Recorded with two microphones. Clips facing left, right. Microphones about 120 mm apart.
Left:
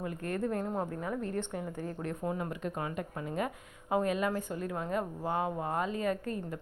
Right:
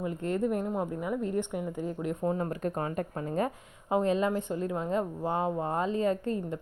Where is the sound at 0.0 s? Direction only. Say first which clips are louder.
Right 4 dB; 20° right (ahead or behind).